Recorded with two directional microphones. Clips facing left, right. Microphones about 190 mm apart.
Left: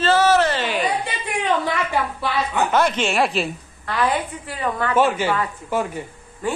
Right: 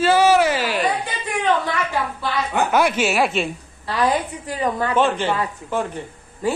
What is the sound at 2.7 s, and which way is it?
Speech, 10° right (ahead or behind).